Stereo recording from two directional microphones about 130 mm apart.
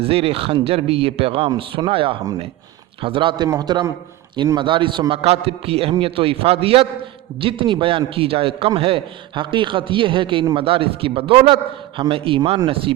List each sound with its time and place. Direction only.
0.0 s a man's voice: 50° right (ahead or behind)